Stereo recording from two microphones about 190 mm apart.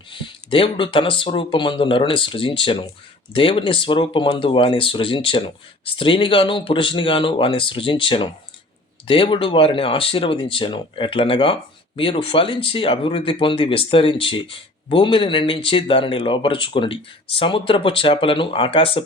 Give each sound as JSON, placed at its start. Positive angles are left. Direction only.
{"t": 0.1, "sound": "speech", "side_deg": 25}